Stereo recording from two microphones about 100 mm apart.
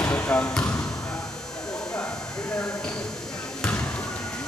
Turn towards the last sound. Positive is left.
turn(degrees=15)  # may be behind; listen again after turning